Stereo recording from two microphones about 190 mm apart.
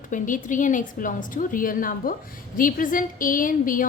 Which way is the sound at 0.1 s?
45° left (ahead or behind).